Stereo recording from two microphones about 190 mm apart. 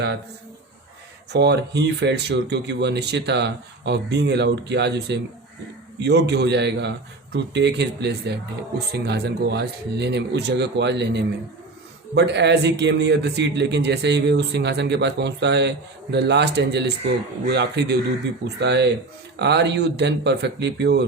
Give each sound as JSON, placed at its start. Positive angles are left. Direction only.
{"t": 1.3, "sound": "speech", "side_deg": -60}